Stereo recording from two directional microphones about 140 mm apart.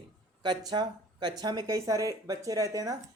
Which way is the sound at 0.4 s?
30° right (ahead or behind).